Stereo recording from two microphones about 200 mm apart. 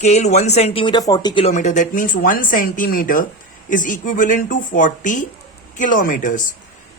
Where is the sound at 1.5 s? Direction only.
35° left (ahead or behind).